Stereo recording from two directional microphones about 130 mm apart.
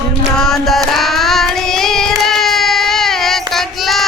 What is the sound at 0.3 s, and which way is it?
Child singing, 5° left (ahead or behind).